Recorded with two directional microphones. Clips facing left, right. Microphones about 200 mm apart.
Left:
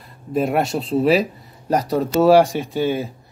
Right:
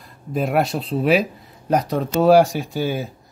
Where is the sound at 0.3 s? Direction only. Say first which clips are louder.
Left 1 dB; centre (ahead or behind).